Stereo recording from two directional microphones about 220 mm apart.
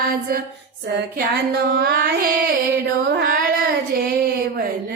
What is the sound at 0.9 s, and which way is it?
Singing, 50° right (ahead or behind).